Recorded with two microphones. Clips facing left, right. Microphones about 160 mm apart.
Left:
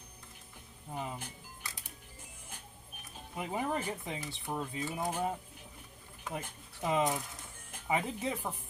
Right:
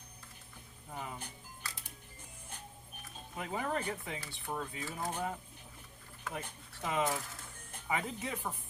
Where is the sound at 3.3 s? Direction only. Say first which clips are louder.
Left 2 dB; 15° left (ahead or behind).